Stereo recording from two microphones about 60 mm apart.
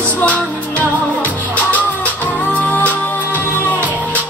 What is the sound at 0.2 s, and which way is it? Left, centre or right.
Music, left.